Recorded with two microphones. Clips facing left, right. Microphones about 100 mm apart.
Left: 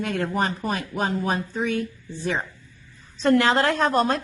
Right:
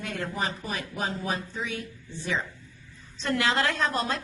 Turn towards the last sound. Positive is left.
turn(degrees=50)  # may be behind; listen again after turning